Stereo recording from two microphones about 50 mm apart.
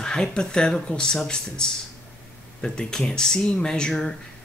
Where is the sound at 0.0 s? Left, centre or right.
Centre.